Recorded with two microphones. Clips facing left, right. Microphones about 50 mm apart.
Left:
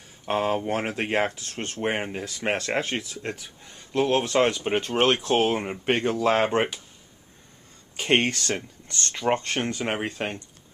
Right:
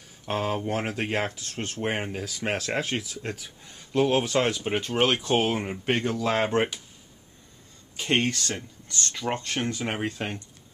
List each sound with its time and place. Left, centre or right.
0.2 s speech: centre
1.5 s speech: centre
7.9 s speech: left
9.8 s speech: centre